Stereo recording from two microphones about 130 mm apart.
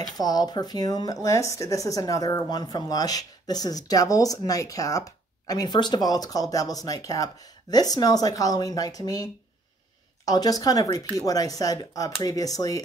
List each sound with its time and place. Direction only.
0.2 s speech: 30° left (ahead or behind)